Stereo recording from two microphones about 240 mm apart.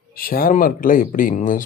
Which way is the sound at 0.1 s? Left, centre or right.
Left.